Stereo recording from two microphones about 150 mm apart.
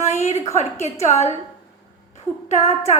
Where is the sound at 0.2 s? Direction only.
45° left (ahead or behind).